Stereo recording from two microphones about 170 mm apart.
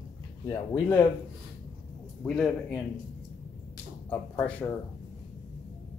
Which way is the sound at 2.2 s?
5° left (ahead or behind).